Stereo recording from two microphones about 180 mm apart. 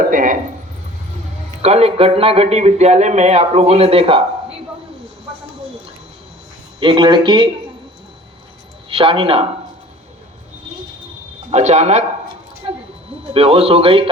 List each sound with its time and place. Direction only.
0.1 s speech: 50° right (ahead or behind)
1.6 s speech: 35° right (ahead or behind)
6.7 s speech: 30° right (ahead or behind)
8.9 s speech: 30° right (ahead or behind)
11.5 s speech: 40° right (ahead or behind)
13.3 s speech: 35° right (ahead or behind)